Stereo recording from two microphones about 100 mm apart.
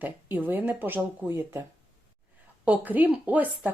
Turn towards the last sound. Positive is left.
turn(degrees=-15)  # may be behind; listen again after turning